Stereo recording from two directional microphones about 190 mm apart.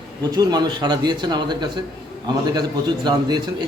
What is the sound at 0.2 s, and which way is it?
A man's voice, 20° right (ahead or behind).